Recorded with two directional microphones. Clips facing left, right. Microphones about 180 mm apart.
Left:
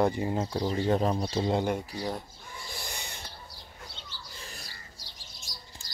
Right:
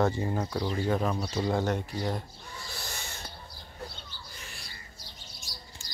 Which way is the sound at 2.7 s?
15° left (ahead or behind).